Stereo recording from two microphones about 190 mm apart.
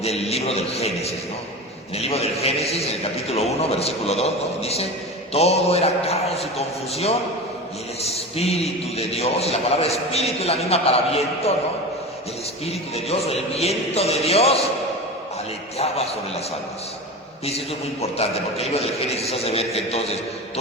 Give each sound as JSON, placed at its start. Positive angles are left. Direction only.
{"t": 0.0, "sound": "a man's voice", "side_deg": 35}
{"t": 12.6, "sound": "a man's voice", "side_deg": 30}
{"t": 18.0, "sound": "a man's voice", "side_deg": 35}